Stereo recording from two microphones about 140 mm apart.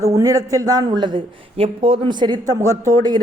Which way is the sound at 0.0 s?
25° right (ahead or behind).